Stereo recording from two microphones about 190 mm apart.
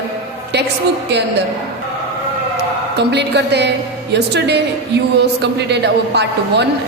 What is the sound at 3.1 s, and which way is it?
A man's voice, 65° right (ahead or behind).